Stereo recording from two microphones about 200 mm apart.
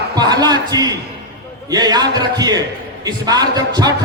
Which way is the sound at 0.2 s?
20° right (ahead or behind).